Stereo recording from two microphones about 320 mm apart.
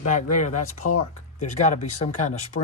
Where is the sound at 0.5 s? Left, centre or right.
Left.